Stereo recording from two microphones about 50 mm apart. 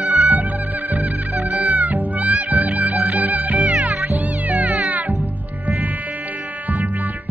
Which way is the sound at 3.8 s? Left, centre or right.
Right.